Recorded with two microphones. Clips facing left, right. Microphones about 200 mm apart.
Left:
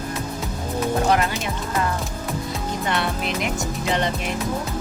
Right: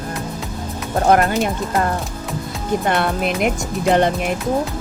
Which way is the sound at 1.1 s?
55° right (ahead or behind).